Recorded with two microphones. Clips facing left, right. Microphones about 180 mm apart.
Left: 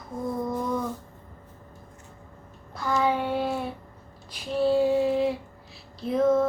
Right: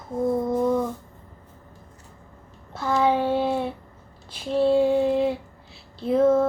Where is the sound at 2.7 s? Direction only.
30° right (ahead or behind).